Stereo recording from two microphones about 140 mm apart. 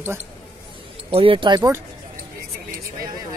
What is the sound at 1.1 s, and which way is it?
Speech, 40° right (ahead or behind).